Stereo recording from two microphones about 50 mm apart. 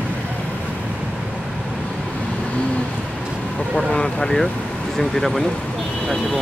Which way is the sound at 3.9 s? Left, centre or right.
Centre.